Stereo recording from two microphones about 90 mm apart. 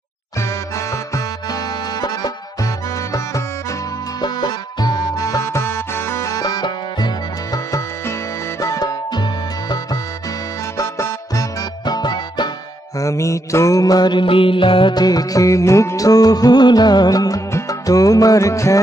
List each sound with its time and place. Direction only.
0.4 s music: 35° left (ahead or behind)
4.2 s music: 50° left (ahead or behind)
8.5 s music: 45° left (ahead or behind)
10.8 s music: 35° left (ahead or behind)
11.8 s music: 50° left (ahead or behind)
13.0 s mantra: 35° left (ahead or behind)
14.2 s music: 80° left
15.0 s music: 45° left (ahead or behind)